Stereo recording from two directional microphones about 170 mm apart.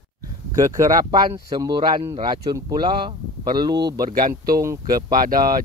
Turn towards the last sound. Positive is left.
turn(degrees=-60)  # may be behind; listen again after turning